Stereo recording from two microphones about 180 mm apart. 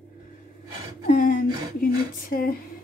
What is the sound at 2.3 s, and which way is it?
Speech, 55° left (ahead or behind).